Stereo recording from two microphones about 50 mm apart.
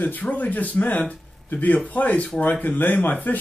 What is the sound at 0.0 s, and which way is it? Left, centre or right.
Speech, left.